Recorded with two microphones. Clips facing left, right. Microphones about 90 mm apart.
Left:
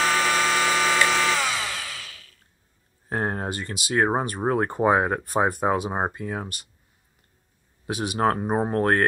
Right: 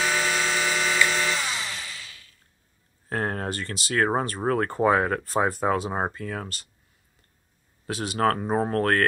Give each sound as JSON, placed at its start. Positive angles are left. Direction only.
{"t": 0.0, "sound": "a sound", "side_deg": 60}
{"t": 3.1, "sound": "speech", "side_deg": 20}
{"t": 7.8, "sound": "speech", "side_deg": 15}